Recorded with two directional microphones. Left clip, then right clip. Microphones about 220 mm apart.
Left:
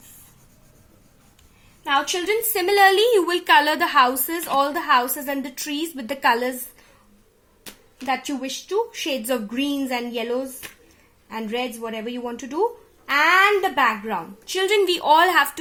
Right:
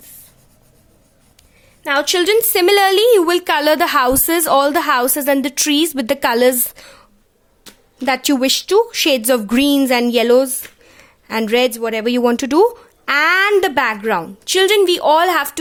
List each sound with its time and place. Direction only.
1.8 s a woman's voice: 50° right (ahead or behind)
8.0 s speech: 45° right (ahead or behind)